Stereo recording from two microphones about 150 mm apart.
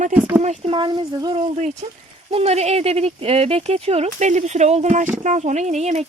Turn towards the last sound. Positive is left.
turn(degrees=-50)  # may be behind; listen again after turning